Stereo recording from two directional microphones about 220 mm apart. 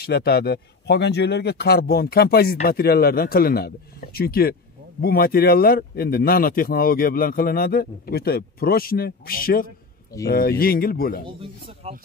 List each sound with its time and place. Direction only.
0.0 s speech: 45° left (ahead or behind)
11.2 s speech: 25° right (ahead or behind)